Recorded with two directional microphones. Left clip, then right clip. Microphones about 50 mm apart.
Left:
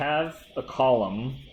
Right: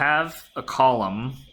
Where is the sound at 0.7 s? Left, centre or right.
Right.